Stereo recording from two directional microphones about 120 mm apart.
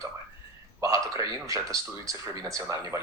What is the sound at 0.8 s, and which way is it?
Speech, 25° right (ahead or behind).